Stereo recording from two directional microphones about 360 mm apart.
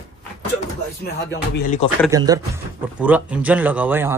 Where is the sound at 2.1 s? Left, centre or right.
Centre.